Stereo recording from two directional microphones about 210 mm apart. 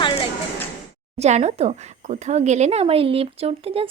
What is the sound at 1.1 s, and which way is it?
Speech, 30° right (ahead or behind).